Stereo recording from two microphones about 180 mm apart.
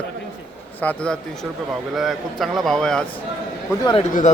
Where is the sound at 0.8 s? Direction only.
10° left (ahead or behind).